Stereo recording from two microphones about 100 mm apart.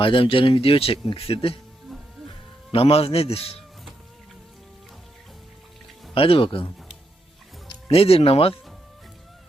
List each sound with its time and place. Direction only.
0.0 s speech: 60° left (ahead or behind)
1.9 s music: centre (ahead or behind)
2.7 s speech: 75° left (ahead or behind)
6.1 s speech: 65° left (ahead or behind)
7.9 s speech: 80° left